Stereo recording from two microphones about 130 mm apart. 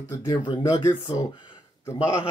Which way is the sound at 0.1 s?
25° left (ahead or behind).